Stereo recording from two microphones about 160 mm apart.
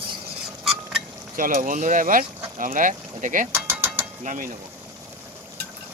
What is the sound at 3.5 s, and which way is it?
Mechanisms, 15° right (ahead or behind).